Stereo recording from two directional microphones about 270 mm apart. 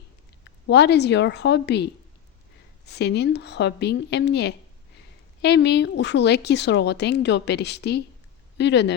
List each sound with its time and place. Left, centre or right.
0.4 s a woman's voice: left